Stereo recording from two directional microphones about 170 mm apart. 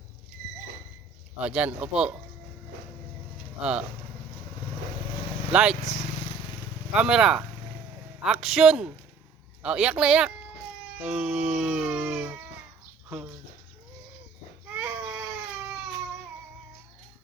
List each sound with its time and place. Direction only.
1.4 s music: 5° right (ahead or behind)
3.6 s music: 5° right (ahead or behind)
5.5 s speech: 5° right (ahead or behind)
5.8 s speech: 40° left (ahead or behind)
6.9 s a man's voice: 5° right (ahead or behind)
10.9 s music: 5° right (ahead or behind)
13.1 s speech: 5° right (ahead or behind)
14.7 s baby cry: 10° right (ahead or behind)